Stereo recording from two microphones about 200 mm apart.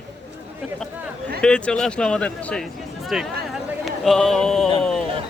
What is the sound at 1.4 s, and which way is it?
Speech, 5° left (ahead or behind).